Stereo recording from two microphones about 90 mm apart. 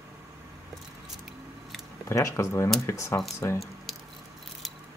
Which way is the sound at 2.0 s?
35° left (ahead or behind).